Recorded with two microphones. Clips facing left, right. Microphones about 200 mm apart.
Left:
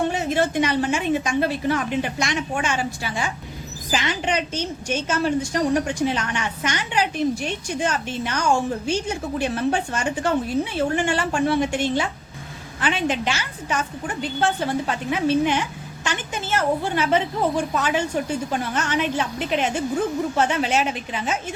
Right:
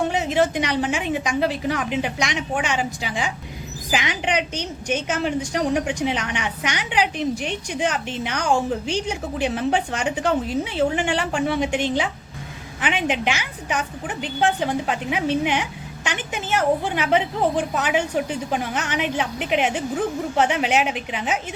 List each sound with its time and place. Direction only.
0.1 s a woman's voice: 15° right (ahead or behind)